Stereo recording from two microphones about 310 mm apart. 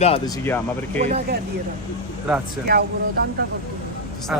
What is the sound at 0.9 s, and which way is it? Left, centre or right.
Speech, right.